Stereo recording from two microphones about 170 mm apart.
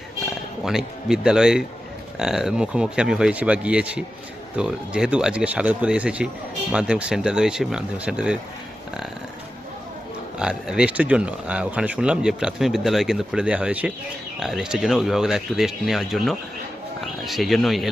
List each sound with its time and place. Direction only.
0.6 s speech: 5° right (ahead or behind)
10.3 s speech: 5° right (ahead or behind)